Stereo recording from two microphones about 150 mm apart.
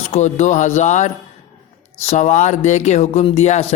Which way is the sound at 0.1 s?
50° left (ahead or behind).